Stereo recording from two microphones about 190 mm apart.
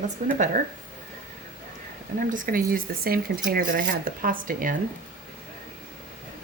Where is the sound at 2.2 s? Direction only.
45° right (ahead or behind).